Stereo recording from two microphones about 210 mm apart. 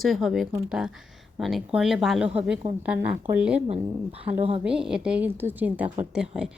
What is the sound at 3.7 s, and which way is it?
Speech, 30° right (ahead or behind).